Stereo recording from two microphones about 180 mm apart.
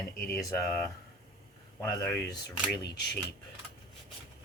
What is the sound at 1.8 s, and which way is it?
Speech, 15° left (ahead or behind).